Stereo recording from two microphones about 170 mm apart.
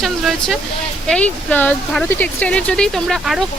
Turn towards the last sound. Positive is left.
turn(degrees=0)  # may be behind; listen again after turning